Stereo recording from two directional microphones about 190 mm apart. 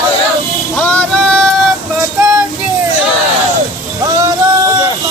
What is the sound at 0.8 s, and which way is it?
Music, 5° left (ahead or behind).